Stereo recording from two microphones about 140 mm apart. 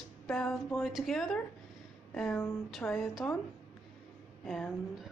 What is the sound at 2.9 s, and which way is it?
Speech, centre (ahead or behind).